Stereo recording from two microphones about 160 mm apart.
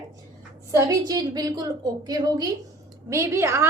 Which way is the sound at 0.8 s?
25° right (ahead or behind).